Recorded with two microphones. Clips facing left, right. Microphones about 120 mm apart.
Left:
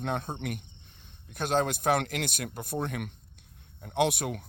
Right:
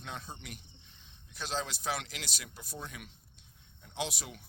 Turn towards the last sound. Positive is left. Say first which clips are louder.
# left 12 dB
turn(degrees=60)  # may be behind; listen again after turning